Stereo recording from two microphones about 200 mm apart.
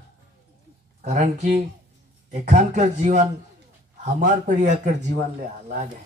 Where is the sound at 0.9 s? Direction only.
35° right (ahead or behind).